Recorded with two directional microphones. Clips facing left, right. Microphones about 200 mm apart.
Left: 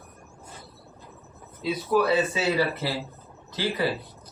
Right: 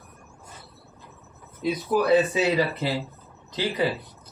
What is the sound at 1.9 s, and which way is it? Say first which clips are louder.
Speech: right 2 dB; 20° right (ahead or behind).